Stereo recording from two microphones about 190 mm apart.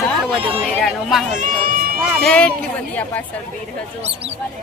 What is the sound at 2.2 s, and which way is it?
Speech, 5° left (ahead or behind).